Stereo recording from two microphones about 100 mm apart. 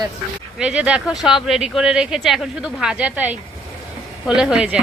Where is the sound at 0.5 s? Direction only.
10° right (ahead or behind).